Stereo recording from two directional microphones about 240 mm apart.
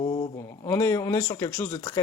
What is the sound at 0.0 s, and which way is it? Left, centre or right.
Speech, left.